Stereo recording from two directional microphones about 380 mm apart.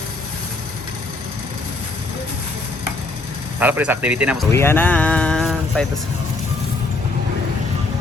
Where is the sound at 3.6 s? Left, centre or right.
Centre.